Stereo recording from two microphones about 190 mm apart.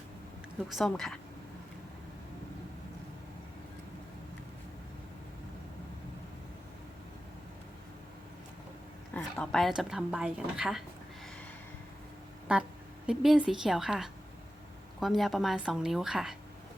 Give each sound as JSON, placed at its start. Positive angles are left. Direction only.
{"t": 0.7, "sound": "a woman's voice", "side_deg": 0}
{"t": 9.1, "sound": "a woman's voice", "side_deg": 5}
{"t": 12.5, "sound": "a woman's voice", "side_deg": -5}